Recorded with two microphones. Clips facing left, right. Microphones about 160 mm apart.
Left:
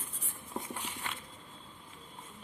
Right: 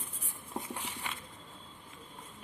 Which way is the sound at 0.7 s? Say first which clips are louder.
Even; 15° right (ahead or behind).